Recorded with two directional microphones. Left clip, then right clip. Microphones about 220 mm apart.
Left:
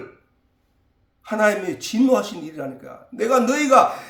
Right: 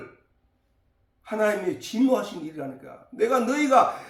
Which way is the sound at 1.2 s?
45° left (ahead or behind).